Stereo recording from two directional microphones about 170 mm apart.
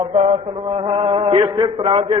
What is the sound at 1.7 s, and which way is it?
Mantra, 30° right (ahead or behind).